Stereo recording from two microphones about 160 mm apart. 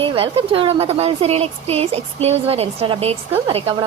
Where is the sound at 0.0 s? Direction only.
35° right (ahead or behind).